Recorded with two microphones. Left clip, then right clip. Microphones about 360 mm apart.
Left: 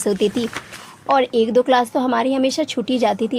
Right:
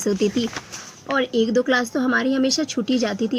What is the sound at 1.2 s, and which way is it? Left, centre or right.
Speech, centre.